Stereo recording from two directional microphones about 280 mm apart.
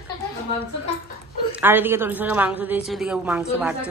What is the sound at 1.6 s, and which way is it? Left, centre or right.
A woman's voice, centre.